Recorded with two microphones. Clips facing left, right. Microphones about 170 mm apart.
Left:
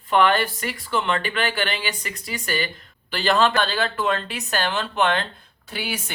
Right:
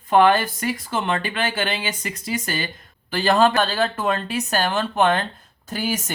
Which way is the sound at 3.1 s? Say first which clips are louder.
Right 2 dB; 45° right (ahead or behind).